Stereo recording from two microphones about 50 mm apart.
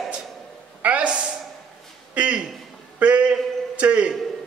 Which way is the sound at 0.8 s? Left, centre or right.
Right.